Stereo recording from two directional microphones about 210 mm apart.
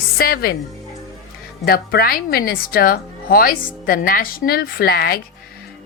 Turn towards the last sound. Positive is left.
turn(degrees=45)  # may be behind; listen again after turning